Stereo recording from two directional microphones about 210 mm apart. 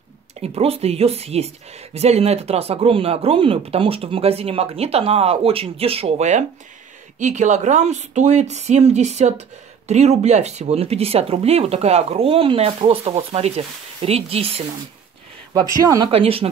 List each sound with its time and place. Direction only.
0.4 s a woman's voice: 30° right (ahead or behind)
15.8 s a woman's voice: 15° right (ahead or behind)